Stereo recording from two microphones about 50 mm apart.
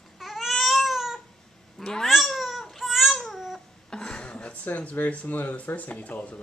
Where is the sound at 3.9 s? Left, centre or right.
Centre.